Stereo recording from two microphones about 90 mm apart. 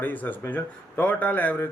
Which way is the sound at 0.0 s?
20° left (ahead or behind).